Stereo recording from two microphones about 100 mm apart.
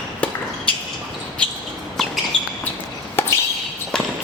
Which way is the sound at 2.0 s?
5° left (ahead or behind).